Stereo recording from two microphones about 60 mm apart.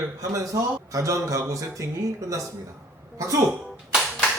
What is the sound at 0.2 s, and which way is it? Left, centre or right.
A man's voice, right.